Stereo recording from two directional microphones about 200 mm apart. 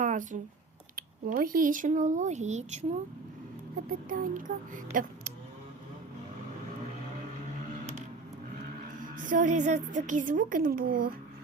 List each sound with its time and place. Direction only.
0.0 s a woman's voice: 40° right (ahead or behind)
9.0 s a woman's voice: 40° right (ahead or behind)